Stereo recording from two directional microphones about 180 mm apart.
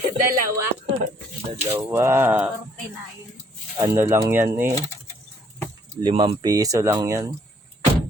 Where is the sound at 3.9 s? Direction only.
15° right (ahead or behind).